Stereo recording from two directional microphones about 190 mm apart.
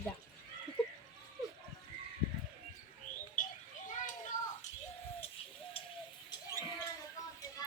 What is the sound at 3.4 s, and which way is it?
Bird, 45° left (ahead or behind).